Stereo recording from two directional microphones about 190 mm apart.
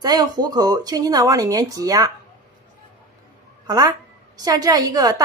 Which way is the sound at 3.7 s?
20° right (ahead or behind).